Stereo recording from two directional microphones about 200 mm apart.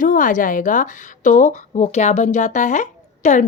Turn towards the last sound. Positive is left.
turn(degrees=40)  # may be behind; listen again after turning